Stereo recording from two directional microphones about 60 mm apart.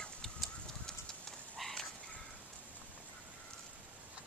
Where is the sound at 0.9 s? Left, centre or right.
Centre.